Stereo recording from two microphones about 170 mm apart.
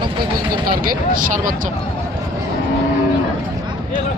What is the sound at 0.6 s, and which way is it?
Speech, 60° right (ahead or behind).